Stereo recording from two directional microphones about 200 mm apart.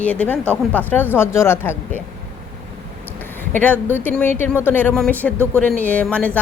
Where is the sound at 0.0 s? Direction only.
5° left (ahead or behind).